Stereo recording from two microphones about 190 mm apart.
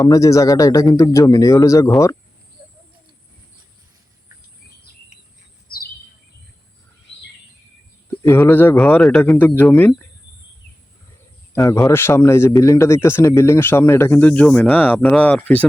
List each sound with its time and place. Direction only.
0.0 s speech: 15° left (ahead or behind)
8.2 s speech: 15° left (ahead or behind)
11.5 s speech: 15° left (ahead or behind)